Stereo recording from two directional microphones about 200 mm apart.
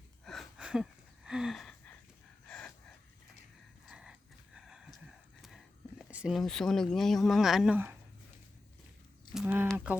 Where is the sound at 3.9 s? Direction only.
5° right (ahead or behind).